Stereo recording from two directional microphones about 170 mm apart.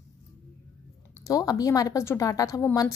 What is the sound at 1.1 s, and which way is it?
A woman's voice, 20° left (ahead or behind).